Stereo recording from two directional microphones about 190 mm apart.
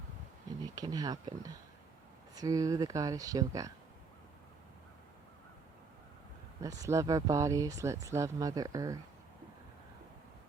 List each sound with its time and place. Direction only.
0.6 s speech: 20° right (ahead or behind)
6.6 s speech: 15° right (ahead or behind)